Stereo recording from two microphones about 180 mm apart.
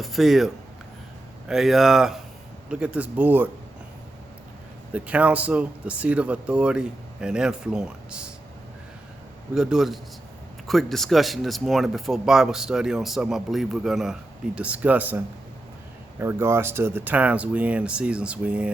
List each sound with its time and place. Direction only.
0.0 s speech: centre (ahead or behind)
4.9 s speech: 5° right (ahead or behind)
9.6 s speech: 5° right (ahead or behind)